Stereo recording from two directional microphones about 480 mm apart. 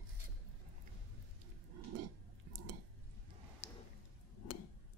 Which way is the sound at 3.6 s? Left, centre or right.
Centre.